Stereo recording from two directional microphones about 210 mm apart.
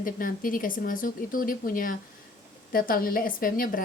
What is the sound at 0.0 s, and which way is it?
A woman's voice, 40° left (ahead or behind).